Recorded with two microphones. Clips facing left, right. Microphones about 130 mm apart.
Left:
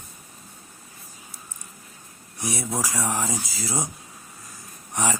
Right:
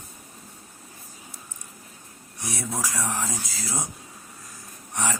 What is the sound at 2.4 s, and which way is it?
Speech, 10° left (ahead or behind).